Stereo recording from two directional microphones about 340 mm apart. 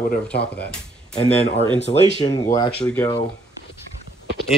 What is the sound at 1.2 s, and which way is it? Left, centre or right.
Speech, centre.